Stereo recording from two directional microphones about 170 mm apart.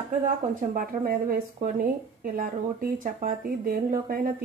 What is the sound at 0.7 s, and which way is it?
Speech, 60° right (ahead or behind).